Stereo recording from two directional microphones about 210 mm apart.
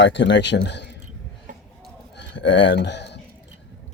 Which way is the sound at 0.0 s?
55° left (ahead or behind).